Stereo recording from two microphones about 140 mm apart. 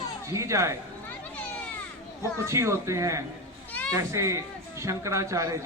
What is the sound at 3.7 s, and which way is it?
Children playing, 10° left (ahead or behind).